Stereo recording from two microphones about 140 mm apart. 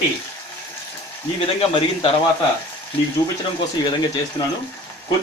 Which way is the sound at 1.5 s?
40° left (ahead or behind).